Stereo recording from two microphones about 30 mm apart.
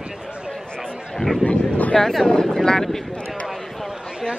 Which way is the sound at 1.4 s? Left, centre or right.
Left.